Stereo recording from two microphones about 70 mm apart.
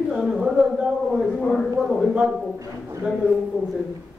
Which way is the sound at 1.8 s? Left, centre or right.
Centre.